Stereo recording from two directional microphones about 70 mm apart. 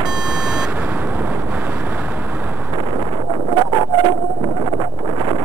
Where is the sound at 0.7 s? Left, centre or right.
Right.